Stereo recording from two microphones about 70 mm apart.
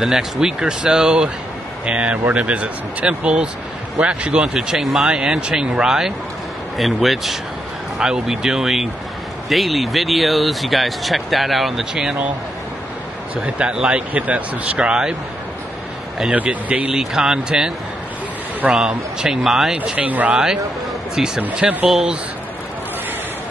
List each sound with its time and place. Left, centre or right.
0.0 s speech: centre
13.4 s speech: centre
16.3 s speech: right
16.9 s speech: centre
19.8 s speech: right
21.2 s speech: centre